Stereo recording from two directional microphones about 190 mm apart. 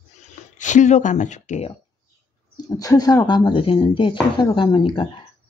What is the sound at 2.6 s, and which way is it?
Speech, 20° left (ahead or behind).